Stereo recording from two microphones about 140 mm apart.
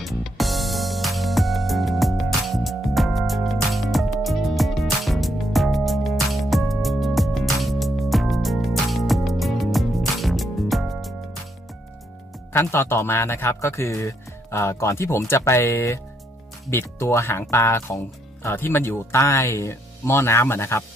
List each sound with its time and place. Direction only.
0.0 s music: centre (ahead or behind)
12.5 s speech: 15° left (ahead or behind)